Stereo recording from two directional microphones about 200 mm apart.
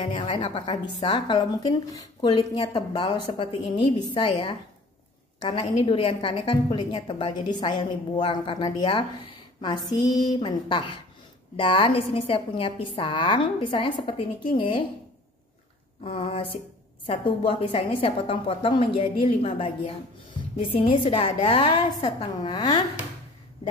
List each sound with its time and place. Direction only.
0.0 s a woman's voice: 25° left (ahead or behind)
16.0 s a woman's voice: 30° left (ahead or behind)